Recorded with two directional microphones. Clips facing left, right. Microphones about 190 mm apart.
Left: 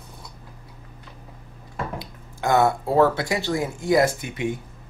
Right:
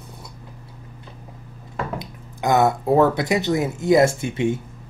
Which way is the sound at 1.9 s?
20° right (ahead or behind).